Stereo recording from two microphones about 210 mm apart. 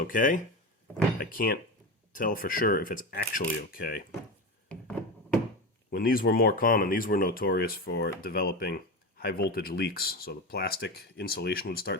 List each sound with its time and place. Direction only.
0.0 s speech: 40° left (ahead or behind)
4.7 s wood: 5° left (ahead or behind)
5.9 s speech: 45° left (ahead or behind)